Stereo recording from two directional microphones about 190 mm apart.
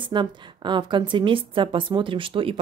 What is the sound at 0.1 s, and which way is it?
Speech, 25° right (ahead or behind).